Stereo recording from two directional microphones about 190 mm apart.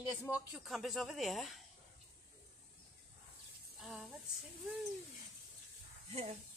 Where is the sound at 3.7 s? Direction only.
Centre (ahead or behind).